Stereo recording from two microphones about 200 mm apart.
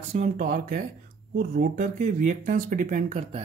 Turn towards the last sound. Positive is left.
turn(degrees=-35)  # may be behind; listen again after turning